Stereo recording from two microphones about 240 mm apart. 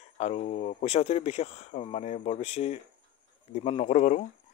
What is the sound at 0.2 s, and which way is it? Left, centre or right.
Speech, left.